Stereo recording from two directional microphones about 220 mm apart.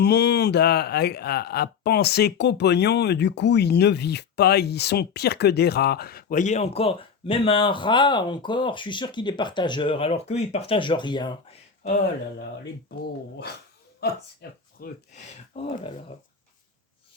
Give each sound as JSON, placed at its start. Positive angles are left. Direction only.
{"t": 0.0, "sound": "speech", "side_deg": 50}
{"t": 11.8, "sound": "speech", "side_deg": 40}
{"t": 14.8, "sound": "speech", "side_deg": 30}